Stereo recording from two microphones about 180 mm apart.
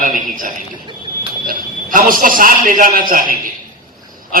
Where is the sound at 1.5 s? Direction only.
50° right (ahead or behind).